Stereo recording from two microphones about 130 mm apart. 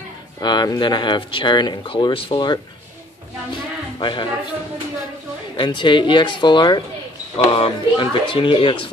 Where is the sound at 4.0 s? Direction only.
35° left (ahead or behind).